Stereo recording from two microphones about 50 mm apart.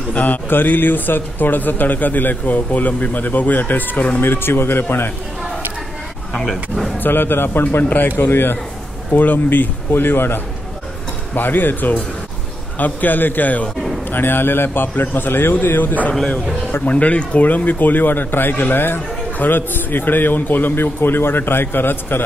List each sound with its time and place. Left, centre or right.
0.1 s speech: left
4.2 s a man's voice: left
6.4 s speech: centre
7.0 s a man's voice: left
14.1 s a man's voice: left